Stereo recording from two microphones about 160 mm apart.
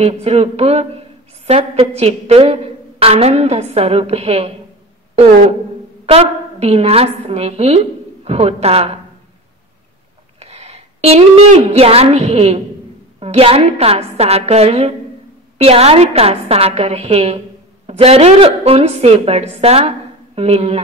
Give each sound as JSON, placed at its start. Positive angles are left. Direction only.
{"t": 0.0, "sound": "a woman's voice", "side_deg": -40}
{"t": 6.0, "sound": "a woman's voice", "side_deg": -40}
{"t": 10.4, "sound": "a woman's voice", "side_deg": -40}